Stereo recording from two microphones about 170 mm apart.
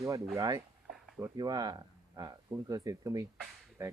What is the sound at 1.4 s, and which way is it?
Speech, 25° right (ahead or behind).